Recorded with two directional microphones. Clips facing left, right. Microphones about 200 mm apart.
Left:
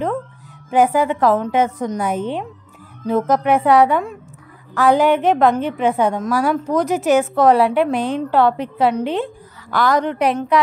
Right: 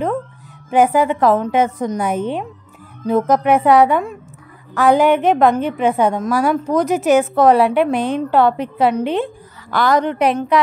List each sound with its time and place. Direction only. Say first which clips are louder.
0.7 s a woman's voice: right 1 dB; 20° right (ahead or behind)